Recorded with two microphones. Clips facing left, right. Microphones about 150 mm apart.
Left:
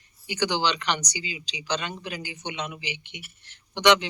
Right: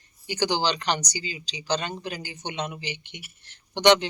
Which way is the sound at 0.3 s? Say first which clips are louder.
Right 1 dB; 35° right (ahead or behind).